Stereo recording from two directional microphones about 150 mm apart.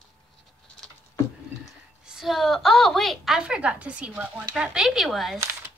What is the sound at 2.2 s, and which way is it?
A woman's voice, centre (ahead or behind).